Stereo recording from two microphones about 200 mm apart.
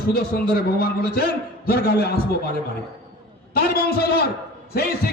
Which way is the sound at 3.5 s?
50° left (ahead or behind).